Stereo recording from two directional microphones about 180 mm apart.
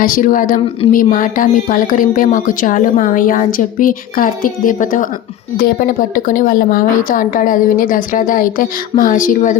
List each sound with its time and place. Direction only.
0.0 s speech: 50° left (ahead or behind)